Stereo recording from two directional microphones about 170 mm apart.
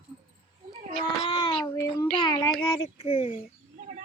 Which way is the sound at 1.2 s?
30° left (ahead or behind).